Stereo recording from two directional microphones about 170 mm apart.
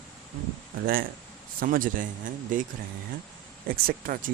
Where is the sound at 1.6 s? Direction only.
55° right (ahead or behind).